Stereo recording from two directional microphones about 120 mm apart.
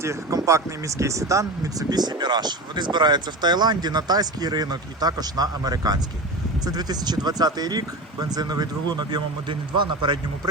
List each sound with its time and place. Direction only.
0.0 s speech: 25° right (ahead or behind); by 10.5 s 40° right (ahead or behind)